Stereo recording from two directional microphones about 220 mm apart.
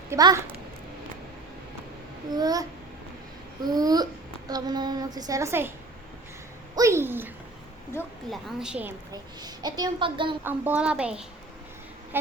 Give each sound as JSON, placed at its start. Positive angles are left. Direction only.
{"t": 0.1, "sound": "speech", "side_deg": -15}
{"t": 2.3, "sound": "speech", "side_deg": -15}
{"t": 6.7, "sound": "speech", "side_deg": -15}
{"t": 7.9, "sound": "speech", "side_deg": 10}
{"t": 8.3, "sound": "speech", "side_deg": 0}
{"t": 9.1, "sound": "a woman's voice", "side_deg": -20}
{"t": 10.4, "sound": "speech", "side_deg": -10}